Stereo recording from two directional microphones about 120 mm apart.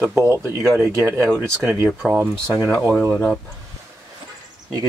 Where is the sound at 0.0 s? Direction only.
20° right (ahead or behind).